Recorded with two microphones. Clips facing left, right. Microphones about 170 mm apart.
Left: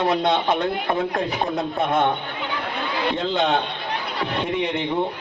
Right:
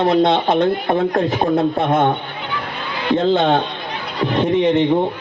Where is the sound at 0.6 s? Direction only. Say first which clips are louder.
Right 6 dB; 40° right (ahead or behind).